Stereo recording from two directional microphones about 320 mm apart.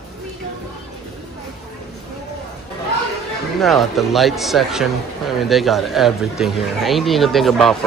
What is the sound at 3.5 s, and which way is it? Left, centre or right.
Speech, centre.